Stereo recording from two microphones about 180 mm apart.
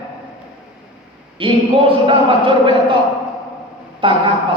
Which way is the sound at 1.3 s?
30° right (ahead or behind).